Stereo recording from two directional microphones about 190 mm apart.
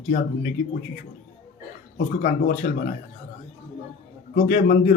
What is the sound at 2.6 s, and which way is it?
Speech, 50° left (ahead or behind).